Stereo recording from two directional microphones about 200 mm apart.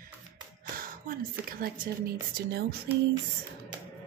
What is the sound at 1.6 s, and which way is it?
A woman's voice, 45° right (ahead or behind).